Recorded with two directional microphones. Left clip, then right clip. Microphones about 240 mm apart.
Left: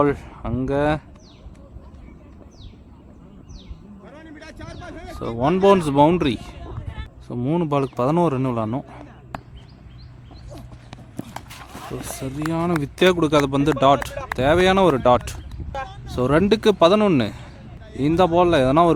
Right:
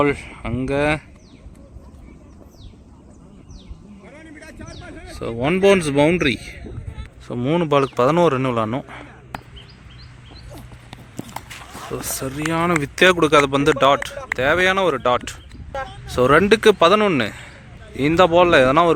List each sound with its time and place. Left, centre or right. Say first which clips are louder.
0.0 s speech: right 1 dB; left
4.0 s vehicle: right 1 dB; left
4.4 s a sound: left 1 dB; centre
5.4 s speech: even; left
6.2 s a man's voice: right 3 dB; centre
11.4 s speech: right 3 dB; centre